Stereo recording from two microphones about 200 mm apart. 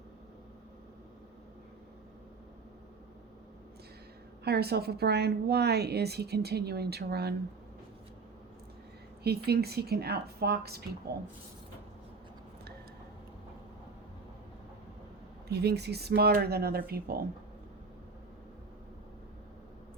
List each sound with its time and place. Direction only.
4.4 s a woman's voice: 55° right (ahead or behind)
9.2 s a woman's voice: 50° right (ahead or behind)
15.4 s a woman's voice: 55° right (ahead or behind)